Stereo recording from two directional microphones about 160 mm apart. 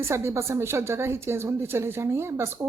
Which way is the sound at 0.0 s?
15° right (ahead or behind).